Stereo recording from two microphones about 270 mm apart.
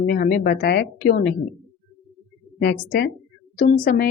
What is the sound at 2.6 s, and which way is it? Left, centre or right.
A woman's voice, left.